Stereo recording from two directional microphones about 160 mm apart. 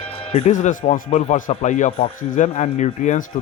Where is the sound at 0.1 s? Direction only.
40° left (ahead or behind).